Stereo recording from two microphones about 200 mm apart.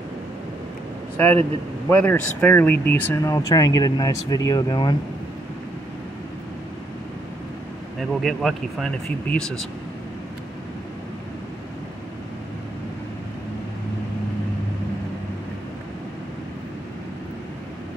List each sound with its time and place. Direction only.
1.2 s speech: 10° left (ahead or behind)
8.0 s speech: centre (ahead or behind)